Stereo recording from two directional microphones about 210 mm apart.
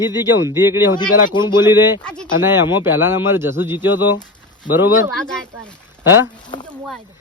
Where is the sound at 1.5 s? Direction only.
10° right (ahead or behind).